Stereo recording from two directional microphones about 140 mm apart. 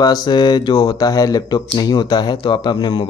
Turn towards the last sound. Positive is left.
turn(degrees=35)  # may be behind; listen again after turning